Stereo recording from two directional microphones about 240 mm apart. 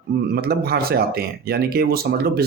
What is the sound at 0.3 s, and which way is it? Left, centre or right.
A man's voice, right.